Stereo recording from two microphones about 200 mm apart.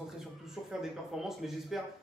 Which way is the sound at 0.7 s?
Centre (ahead or behind).